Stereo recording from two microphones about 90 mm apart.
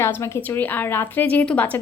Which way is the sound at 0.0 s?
25° left (ahead or behind).